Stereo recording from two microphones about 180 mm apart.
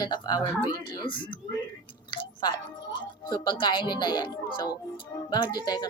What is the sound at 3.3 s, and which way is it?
Speech, 25° left (ahead or behind).